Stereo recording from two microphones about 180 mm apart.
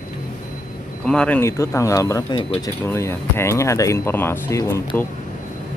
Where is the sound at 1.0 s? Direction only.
5° left (ahead or behind).